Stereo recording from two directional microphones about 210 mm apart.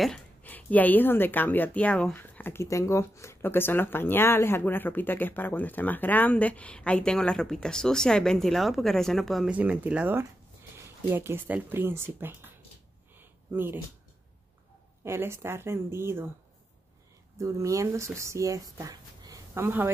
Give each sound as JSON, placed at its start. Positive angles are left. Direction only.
{"t": 0.0, "sound": "speech", "side_deg": 5}
{"t": 13.2, "sound": "a sound", "side_deg": -10}
{"t": 15.0, "sound": "speech", "side_deg": -10}
{"t": 17.4, "sound": "speech", "side_deg": -15}